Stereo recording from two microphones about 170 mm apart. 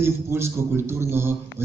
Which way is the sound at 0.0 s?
15° right (ahead or behind).